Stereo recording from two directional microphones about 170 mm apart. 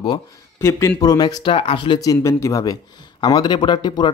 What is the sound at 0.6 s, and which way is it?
Speech, 15° left (ahead or behind).